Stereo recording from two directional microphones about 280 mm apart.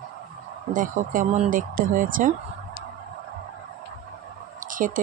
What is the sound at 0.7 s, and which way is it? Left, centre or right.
Speech, right.